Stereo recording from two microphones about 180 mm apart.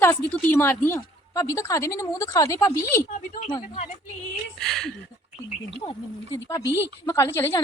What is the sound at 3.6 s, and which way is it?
Speech, 40° left (ahead or behind).